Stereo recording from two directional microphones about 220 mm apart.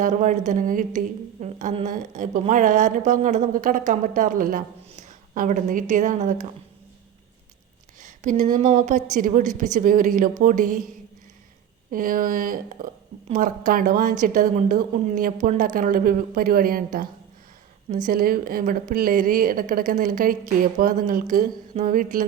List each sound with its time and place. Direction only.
0.0 s a woman's voice: 35° right (ahead or behind)
8.0 s a woman's voice: 35° right (ahead or behind)
11.9 s a woman's voice: 40° right (ahead or behind)